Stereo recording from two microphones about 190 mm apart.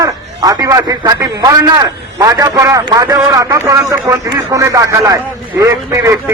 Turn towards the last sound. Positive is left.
turn(degrees=-15)  # may be behind; listen again after turning